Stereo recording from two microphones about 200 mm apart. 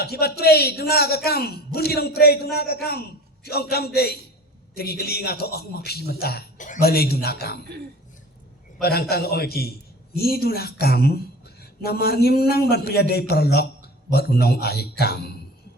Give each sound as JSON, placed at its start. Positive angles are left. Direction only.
{"t": 0.0, "sound": "a man's voice", "side_deg": 50}
{"t": 8.8, "sound": "a man's voice", "side_deg": 50}